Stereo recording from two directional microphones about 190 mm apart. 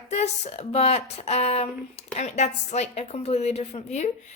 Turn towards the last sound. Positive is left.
turn(degrees=35)  # may be behind; listen again after turning